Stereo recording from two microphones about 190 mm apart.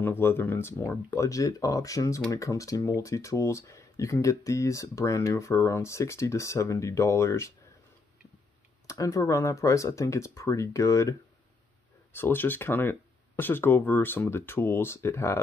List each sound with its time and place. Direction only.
0.0 s speech: 10° left (ahead or behind)
8.8 s speech: 15° left (ahead or behind)